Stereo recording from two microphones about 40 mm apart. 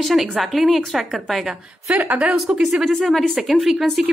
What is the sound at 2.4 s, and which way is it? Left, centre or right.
A woman's voice, centre.